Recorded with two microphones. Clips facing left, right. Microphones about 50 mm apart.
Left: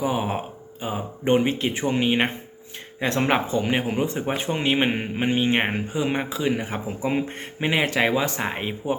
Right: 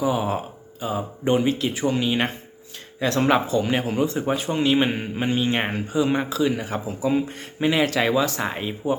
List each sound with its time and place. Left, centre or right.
0.0 s speech: left
7.0 s speech: left